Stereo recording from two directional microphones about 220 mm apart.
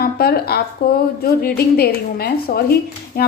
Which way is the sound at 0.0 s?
45° left (ahead or behind).